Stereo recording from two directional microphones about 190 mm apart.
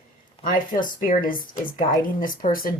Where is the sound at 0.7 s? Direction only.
45° left (ahead or behind).